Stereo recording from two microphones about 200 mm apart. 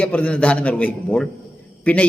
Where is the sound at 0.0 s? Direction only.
5° left (ahead or behind).